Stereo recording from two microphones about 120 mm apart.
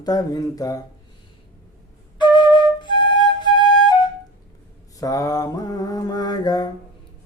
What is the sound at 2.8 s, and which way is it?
Flute, 40° left (ahead or behind).